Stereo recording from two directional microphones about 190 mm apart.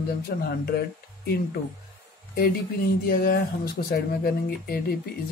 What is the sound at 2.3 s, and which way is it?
Speech, 50° left (ahead or behind).